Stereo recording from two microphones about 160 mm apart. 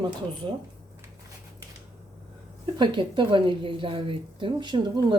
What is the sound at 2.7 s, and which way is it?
A woman's voice, 30° right (ahead or behind).